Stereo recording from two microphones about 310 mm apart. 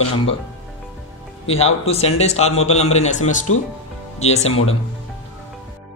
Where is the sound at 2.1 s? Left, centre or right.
Left.